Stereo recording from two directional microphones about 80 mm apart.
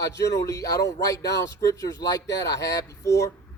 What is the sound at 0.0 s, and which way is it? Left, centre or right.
Speech, left.